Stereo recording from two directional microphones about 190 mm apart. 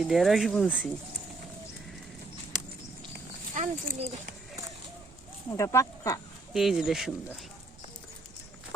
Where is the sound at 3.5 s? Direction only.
40° right (ahead or behind).